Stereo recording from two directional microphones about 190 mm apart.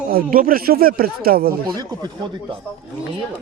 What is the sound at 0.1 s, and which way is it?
Speech, 45° right (ahead or behind).